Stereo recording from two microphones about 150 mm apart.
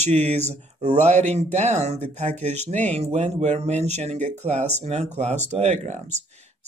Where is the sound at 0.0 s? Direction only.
45° right (ahead or behind).